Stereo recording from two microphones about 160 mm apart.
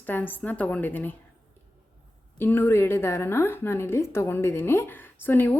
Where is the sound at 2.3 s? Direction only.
15° left (ahead or behind).